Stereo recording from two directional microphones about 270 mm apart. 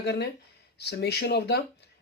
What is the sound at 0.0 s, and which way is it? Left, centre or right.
Speech, left.